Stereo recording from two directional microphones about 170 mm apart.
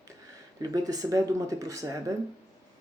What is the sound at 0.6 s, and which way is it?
Speech, 20° right (ahead or behind).